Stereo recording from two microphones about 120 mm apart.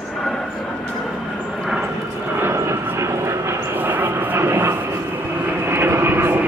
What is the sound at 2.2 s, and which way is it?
Vehicle, 20° right (ahead or behind).